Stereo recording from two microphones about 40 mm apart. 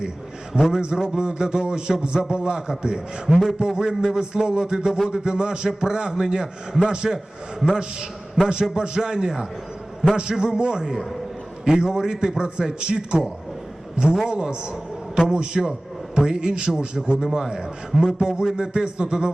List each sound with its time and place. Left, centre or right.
0.6 s a man's voice: centre
1.2 s a man's voice: right